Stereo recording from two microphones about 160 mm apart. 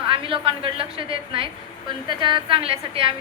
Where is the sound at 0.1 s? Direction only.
35° right (ahead or behind).